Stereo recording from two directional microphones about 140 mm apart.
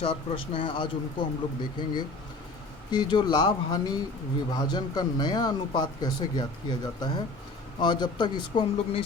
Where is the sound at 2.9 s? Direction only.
30° left (ahead or behind).